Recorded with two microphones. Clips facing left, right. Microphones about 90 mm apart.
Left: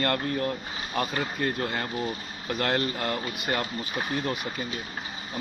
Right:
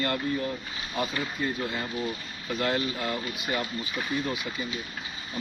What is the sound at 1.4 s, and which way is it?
Speech, 55° left (ahead or behind).